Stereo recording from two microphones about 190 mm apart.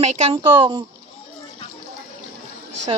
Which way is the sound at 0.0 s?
30° right (ahead or behind).